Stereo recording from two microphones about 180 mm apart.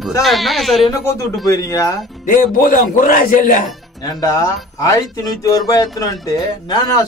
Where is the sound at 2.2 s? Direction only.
50° left (ahead or behind).